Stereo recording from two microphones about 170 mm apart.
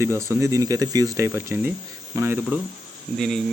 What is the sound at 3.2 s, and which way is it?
Speech, centre (ahead or behind).